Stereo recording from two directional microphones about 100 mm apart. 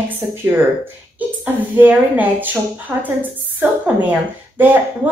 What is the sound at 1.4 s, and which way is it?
A woman's voice, 15° right (ahead or behind).